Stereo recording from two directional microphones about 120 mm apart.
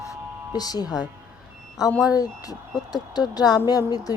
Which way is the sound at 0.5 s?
35° left (ahead or behind).